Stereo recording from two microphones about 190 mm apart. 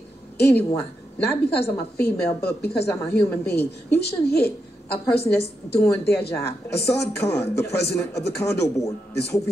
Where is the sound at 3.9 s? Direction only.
60° left (ahead or behind).